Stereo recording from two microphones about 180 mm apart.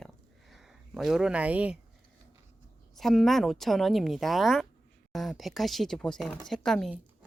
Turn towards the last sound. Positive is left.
turn(degrees=0)  # may be behind; listen again after turning